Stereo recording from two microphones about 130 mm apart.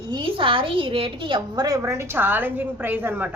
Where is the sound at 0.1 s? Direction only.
40° right (ahead or behind).